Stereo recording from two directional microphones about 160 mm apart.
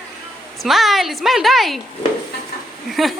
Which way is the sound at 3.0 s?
Centre (ahead or behind).